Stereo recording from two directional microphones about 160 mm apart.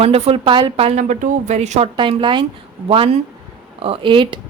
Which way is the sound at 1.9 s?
30° right (ahead or behind).